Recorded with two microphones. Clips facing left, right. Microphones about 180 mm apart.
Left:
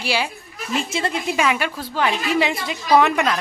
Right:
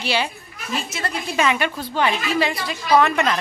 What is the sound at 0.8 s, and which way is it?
Speech, 25° left (ahead or behind).